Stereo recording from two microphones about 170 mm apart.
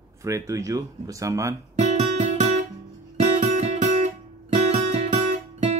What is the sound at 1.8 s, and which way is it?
Music, 40° right (ahead or behind).